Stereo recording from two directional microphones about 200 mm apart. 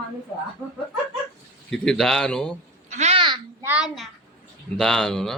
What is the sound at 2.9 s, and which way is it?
Babbling, 35° right (ahead or behind).